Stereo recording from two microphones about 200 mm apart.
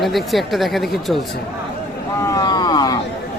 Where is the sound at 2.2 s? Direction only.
15° left (ahead or behind).